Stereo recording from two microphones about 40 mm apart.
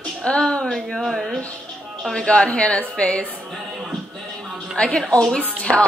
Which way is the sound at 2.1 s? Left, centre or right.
Left.